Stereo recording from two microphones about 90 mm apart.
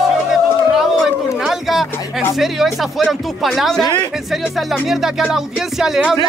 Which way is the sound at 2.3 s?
Centre (ahead or behind).